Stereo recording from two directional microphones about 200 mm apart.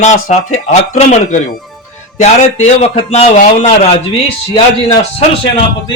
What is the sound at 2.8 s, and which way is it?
Speech, 30° left (ahead or behind).